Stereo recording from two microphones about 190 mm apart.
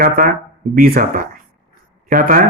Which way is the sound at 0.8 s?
50° right (ahead or behind).